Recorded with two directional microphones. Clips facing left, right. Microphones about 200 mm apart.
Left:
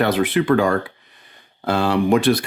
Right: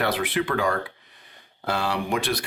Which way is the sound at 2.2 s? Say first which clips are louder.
Left 10 dB; 30° left (ahead or behind).